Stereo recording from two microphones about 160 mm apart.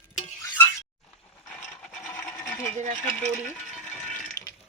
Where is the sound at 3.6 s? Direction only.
Centre (ahead or behind).